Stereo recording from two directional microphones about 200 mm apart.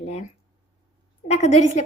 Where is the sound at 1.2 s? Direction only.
35° left (ahead or behind).